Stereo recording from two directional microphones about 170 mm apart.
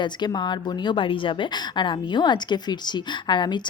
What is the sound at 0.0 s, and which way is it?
A woman's voice, 25° left (ahead or behind).